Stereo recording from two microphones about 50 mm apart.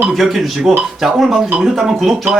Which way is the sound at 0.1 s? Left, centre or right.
Centre.